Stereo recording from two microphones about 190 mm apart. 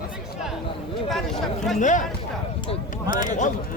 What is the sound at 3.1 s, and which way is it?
Speech, 45° left (ahead or behind).